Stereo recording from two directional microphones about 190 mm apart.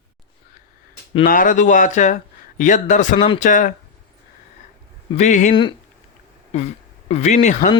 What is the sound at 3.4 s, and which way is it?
Speech, 45° left (ahead or behind).